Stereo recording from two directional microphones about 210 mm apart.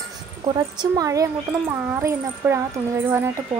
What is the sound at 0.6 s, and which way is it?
Speech, 15° right (ahead or behind).